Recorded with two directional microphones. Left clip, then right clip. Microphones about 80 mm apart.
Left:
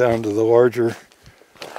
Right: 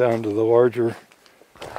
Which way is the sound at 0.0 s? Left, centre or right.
Left.